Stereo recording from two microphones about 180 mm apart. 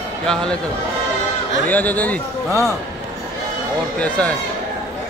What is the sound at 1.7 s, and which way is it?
Speech, 10° left (ahead or behind).